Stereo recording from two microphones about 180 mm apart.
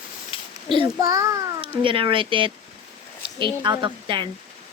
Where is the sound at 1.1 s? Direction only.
15° right (ahead or behind).